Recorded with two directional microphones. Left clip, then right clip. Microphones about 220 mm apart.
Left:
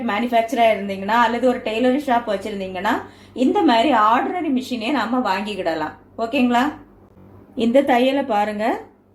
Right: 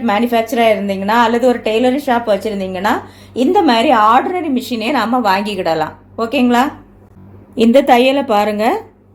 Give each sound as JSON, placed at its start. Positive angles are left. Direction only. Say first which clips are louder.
{"t": 0.0, "sound": "a woman's voice", "louder": "right 5 dB", "side_deg": -45}